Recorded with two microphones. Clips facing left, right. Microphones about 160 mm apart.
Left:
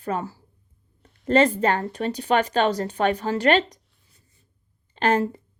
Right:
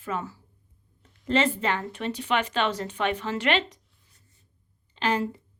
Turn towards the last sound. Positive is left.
turn(degrees=45)  # may be behind; listen again after turning